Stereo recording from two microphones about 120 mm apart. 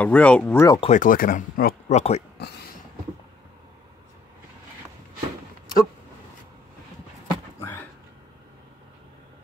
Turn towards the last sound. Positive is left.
turn(degrees=15)  # may be behind; listen again after turning